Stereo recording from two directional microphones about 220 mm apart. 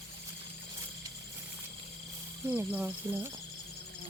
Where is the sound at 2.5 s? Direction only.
10° right (ahead or behind).